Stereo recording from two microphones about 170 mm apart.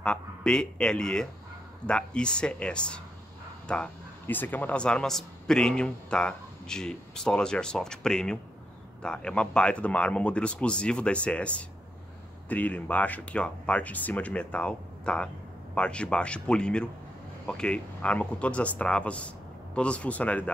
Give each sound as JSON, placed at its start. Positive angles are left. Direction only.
{"t": 0.0, "sound": "speech", "side_deg": 5}